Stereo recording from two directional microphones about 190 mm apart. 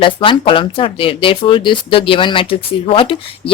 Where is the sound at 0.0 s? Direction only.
25° left (ahead or behind).